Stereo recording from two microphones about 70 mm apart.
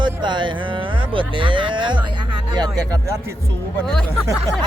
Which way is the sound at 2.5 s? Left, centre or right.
Right.